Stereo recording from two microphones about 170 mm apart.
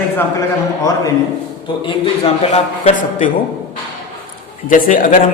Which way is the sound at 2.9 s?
50° left (ahead or behind).